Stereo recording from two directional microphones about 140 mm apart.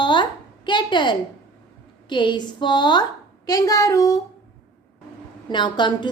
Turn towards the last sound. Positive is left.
turn(degrees=35)  # may be behind; listen again after turning